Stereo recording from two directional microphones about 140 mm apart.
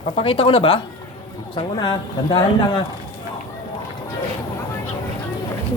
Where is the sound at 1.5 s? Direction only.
30° left (ahead or behind).